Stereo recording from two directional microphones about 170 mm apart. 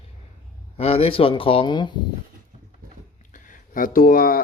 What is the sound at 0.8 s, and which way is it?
A man's voice, 35° left (ahead or behind).